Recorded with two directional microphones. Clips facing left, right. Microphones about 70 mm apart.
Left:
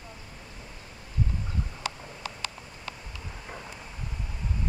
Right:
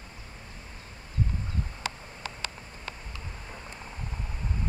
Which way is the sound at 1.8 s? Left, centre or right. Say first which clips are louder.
Left 1 dB; right.